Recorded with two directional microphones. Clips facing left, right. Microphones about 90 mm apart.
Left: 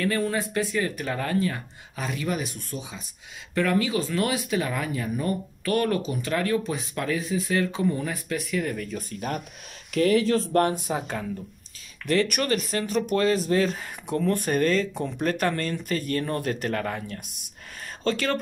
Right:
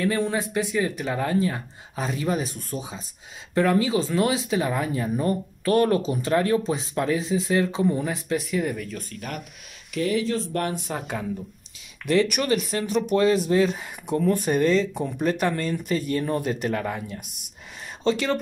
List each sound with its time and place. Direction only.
0.0 s speech: 20° right (ahead or behind)
8.7 s speech: centre (ahead or behind)
9.8 s speech: 50° left (ahead or behind)
10.9 s speech: 10° left (ahead or behind)
12.1 s speech: 10° right (ahead or behind)